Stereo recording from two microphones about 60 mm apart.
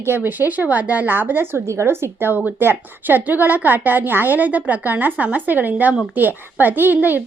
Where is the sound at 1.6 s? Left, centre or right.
Right.